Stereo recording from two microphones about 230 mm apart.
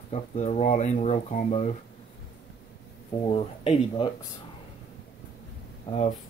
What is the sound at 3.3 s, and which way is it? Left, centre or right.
Speech, left.